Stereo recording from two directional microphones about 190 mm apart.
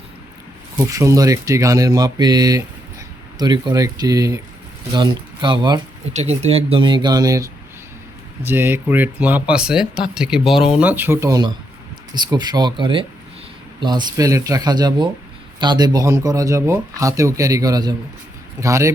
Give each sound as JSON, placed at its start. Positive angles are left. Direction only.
{"t": 0.8, "sound": "speech", "side_deg": -15}
{"t": 6.1, "sound": "speech", "side_deg": -35}